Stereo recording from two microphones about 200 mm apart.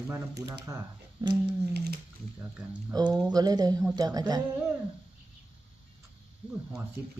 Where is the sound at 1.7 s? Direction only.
55° right (ahead or behind).